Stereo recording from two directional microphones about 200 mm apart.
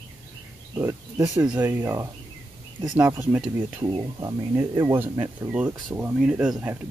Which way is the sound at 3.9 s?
20° right (ahead or behind).